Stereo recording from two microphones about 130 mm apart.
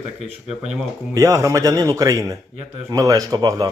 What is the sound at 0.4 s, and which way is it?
Speech, 5° right (ahead or behind).